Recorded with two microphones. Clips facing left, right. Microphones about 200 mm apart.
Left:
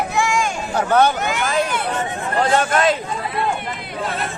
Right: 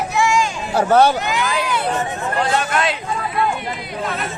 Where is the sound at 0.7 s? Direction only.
40° right (ahead or behind).